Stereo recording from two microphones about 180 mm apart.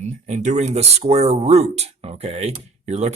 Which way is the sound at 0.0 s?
40° right (ahead or behind).